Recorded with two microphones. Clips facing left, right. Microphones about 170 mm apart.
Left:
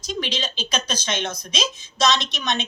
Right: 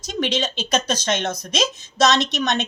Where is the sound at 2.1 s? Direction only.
70° right (ahead or behind).